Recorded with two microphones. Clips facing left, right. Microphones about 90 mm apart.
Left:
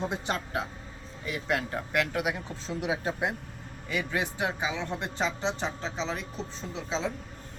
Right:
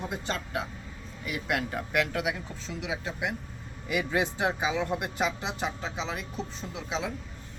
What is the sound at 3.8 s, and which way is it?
Speech, 15° right (ahead or behind).